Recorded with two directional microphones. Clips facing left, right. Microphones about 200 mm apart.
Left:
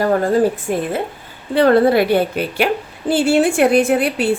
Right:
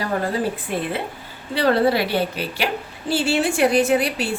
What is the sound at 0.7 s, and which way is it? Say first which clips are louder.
A woman's voice: left 5 dB; 45° left (ahead or behind).